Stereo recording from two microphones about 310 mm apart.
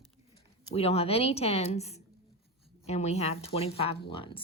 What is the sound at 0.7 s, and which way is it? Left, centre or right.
Speech, centre.